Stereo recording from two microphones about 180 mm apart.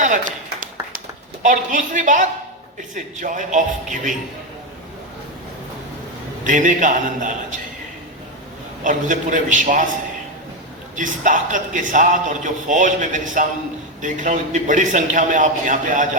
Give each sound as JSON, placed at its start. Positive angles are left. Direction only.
{"t": 0.0, "sound": "a sound", "side_deg": -45}
{"t": 2.9, "sound": "a man's voice", "side_deg": -45}
{"t": 6.4, "sound": "a man's voice", "side_deg": -45}
{"t": 8.8, "sound": "a man's voice", "side_deg": -45}
{"t": 10.9, "sound": "a man's voice", "side_deg": -45}